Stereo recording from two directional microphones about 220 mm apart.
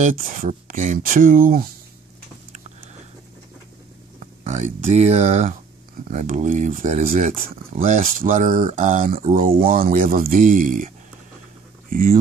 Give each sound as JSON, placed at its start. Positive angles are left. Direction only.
{"t": 0.0, "sound": "speech", "side_deg": -35}
{"t": 4.2, "sound": "speech", "side_deg": -30}
{"t": 11.9, "sound": "speech", "side_deg": -40}